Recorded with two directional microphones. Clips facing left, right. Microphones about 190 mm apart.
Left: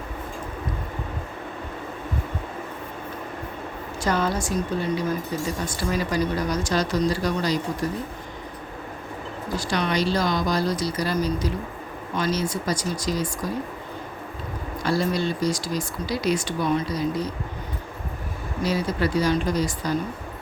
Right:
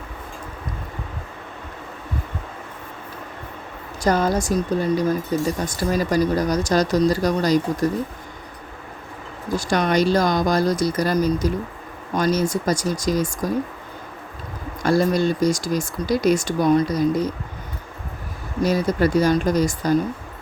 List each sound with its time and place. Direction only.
4.0 s speech: 40° right (ahead or behind)
9.6 s speech: 45° right (ahead or behind)
14.8 s speech: 45° right (ahead or behind)
18.6 s speech: 45° right (ahead or behind)